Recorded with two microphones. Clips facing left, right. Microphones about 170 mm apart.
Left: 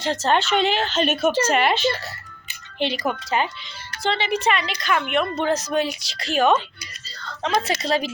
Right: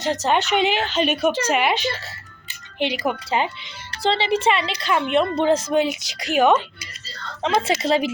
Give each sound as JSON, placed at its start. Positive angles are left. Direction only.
{"t": 0.0, "sound": "speech", "side_deg": -15}
{"t": 3.2, "sound": "a woman's voice", "side_deg": -25}